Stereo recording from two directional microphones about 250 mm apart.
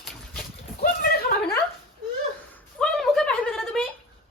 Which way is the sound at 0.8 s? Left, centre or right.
Left.